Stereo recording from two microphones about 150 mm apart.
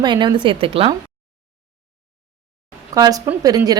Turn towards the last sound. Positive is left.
turn(degrees=-25)  # may be behind; listen again after turning